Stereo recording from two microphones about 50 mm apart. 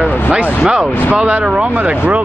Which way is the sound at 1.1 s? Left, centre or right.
Right.